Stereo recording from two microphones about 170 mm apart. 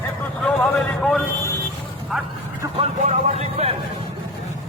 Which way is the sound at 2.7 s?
40° right (ahead or behind).